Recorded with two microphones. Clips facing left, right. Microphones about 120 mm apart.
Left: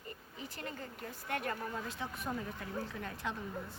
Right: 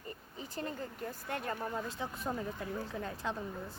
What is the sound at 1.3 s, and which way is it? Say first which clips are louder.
Speech: left 1 dB; 30° right (ahead or behind).